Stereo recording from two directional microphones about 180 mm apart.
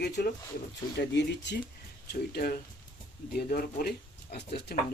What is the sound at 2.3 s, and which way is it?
Speech, 60° left (ahead or behind).